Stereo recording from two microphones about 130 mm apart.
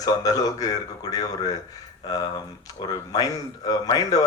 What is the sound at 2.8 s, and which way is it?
A man's voice, 35° left (ahead or behind).